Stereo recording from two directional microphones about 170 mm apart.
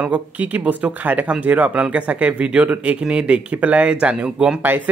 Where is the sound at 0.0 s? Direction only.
10° right (ahead or behind).